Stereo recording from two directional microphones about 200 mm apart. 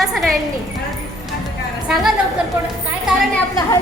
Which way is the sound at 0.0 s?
Centre (ahead or behind).